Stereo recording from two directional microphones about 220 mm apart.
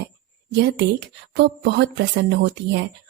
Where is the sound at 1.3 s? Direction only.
50° right (ahead or behind).